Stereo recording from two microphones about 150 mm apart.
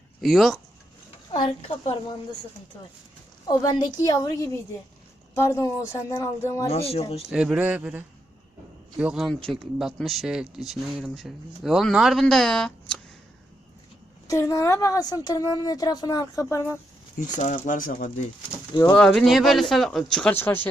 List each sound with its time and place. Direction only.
0.2 s speech: centre (ahead or behind)
1.3 s a woman's voice: 40° left (ahead or behind)
3.5 s a woman's voice: 25° left (ahead or behind)
6.7 s a woman's voice: 40° left (ahead or behind)
7.3 s speech: 5° right (ahead or behind)
14.3 s a woman's voice: 20° left (ahead or behind)
17.2 s speech: 55° left (ahead or behind)
18.7 s a woman's voice: 25° left (ahead or behind)
18.9 s speech: 5° left (ahead or behind)